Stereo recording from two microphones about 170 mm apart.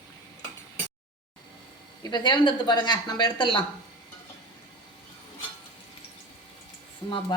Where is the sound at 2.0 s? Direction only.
25° left (ahead or behind).